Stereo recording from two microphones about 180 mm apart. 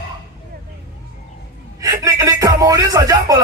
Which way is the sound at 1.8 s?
20° right (ahead or behind).